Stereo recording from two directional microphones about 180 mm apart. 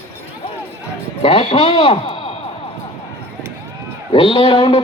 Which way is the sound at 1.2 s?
35° left (ahead or behind).